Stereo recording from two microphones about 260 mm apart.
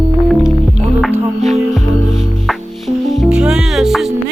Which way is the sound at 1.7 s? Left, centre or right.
Centre.